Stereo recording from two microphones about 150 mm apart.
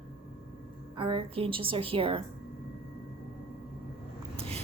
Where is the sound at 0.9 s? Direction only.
35° right (ahead or behind).